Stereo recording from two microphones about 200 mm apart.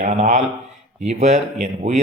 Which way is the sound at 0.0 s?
35° right (ahead or behind).